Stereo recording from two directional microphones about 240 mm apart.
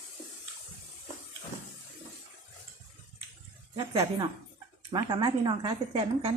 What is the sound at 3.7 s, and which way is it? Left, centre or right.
Speech, centre.